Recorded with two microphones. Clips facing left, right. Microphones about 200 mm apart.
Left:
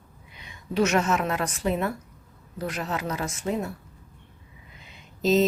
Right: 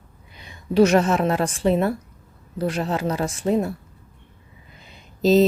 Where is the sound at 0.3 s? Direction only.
35° right (ahead or behind).